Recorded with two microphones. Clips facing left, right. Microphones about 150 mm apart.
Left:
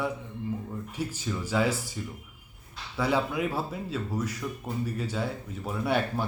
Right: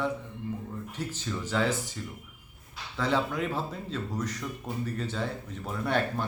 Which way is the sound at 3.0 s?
10° left (ahead or behind).